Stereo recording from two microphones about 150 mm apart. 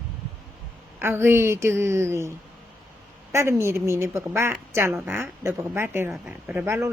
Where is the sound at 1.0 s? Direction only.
15° right (ahead or behind).